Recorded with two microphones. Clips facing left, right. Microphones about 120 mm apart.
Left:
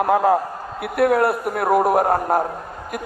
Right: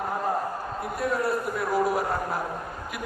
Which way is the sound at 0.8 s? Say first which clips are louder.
Left 11 dB; 70° left (ahead or behind).